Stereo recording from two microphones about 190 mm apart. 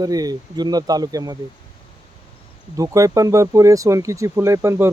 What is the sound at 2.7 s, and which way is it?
Speech, 15° right (ahead or behind).